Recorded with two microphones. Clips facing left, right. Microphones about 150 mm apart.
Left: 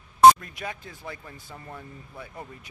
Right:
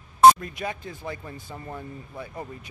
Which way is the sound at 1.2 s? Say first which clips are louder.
Right 5 dB; 15° right (ahead or behind).